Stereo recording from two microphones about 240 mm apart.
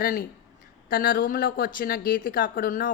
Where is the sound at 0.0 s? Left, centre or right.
Left.